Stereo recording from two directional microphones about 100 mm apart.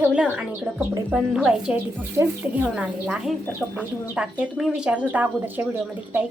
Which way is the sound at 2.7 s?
10° right (ahead or behind).